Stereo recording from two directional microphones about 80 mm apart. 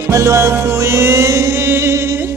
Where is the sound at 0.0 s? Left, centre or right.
Right.